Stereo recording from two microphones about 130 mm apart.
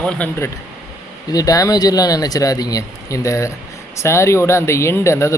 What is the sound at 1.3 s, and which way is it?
Speech, 25° left (ahead or behind).